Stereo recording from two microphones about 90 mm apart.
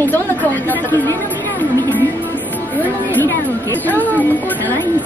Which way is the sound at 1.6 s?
20° left (ahead or behind).